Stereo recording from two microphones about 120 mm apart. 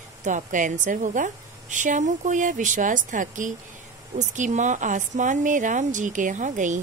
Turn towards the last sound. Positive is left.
turn(degrees=-90)